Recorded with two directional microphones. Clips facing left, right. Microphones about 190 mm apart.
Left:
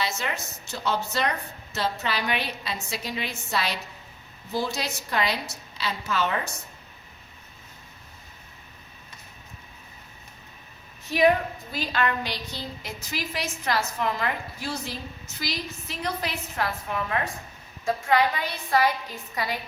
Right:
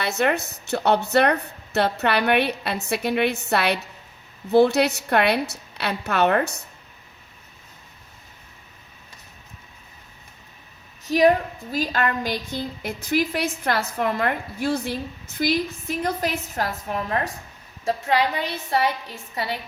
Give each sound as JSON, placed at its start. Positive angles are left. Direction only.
{"t": 0.0, "sound": "a woman's voice", "side_deg": -60}
{"t": 11.1, "sound": "a woman's voice", "side_deg": -40}
{"t": 19.1, "sound": "a woman's voice", "side_deg": -25}